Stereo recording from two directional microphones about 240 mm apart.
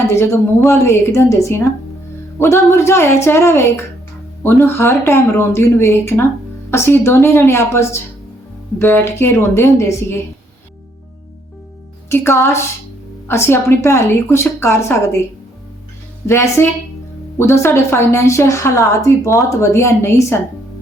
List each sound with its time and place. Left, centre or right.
0.1 s a woman's voice: centre
12.0 s a woman's voice: centre
16.2 s a woman's voice: centre